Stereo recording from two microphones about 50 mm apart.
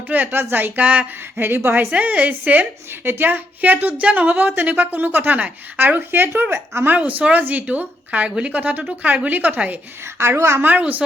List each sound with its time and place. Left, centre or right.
0.1 s a woman's voice: right
1.9 s a woman's voice: right
3.0 s a woman's voice: right
6.0 s speech: right
6.8 s a woman's voice: right
10.2 s a woman's voice: right
10.6 s a woman's voice: right